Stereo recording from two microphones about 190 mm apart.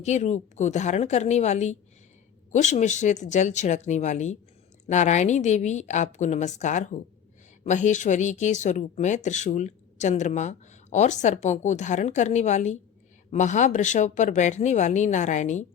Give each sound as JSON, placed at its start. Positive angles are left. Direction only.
{"t": 0.0, "sound": "speech", "side_deg": 35}